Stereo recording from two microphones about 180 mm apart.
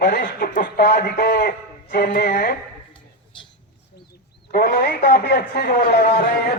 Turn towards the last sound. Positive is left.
turn(degrees=60)  # may be behind; listen again after turning